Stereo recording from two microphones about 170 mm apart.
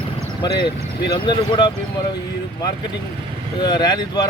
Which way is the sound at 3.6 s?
25° left (ahead or behind).